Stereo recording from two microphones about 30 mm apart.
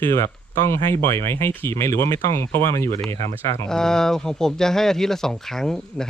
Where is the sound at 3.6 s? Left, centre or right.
Left.